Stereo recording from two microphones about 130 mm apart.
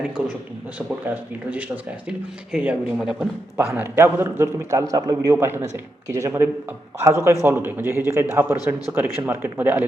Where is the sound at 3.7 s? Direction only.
20° right (ahead or behind).